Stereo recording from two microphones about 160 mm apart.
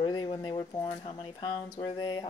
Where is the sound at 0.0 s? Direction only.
30° left (ahead or behind).